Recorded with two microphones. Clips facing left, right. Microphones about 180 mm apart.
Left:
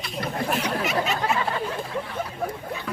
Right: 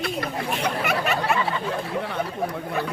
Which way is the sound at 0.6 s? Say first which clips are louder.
Right 1 dB; 60° right (ahead or behind).